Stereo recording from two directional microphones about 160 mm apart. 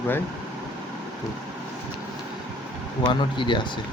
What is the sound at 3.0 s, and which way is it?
Speech, 30° left (ahead or behind).